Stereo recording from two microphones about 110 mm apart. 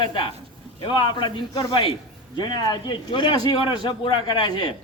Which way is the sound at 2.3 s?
40° left (ahead or behind).